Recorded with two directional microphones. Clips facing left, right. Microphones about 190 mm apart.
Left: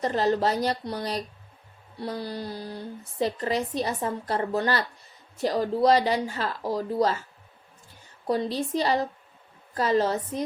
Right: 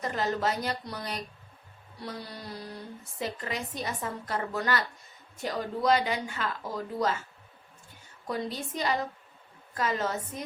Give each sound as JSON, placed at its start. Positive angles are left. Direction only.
{"t": 0.0, "sound": "a woman's voice", "side_deg": 35}
{"t": 8.3, "sound": "a woman's voice", "side_deg": 35}